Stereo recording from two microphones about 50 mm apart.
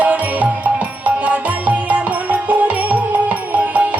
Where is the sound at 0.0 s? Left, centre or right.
Right.